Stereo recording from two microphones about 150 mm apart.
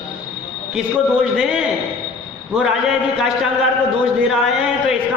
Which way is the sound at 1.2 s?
5° right (ahead or behind).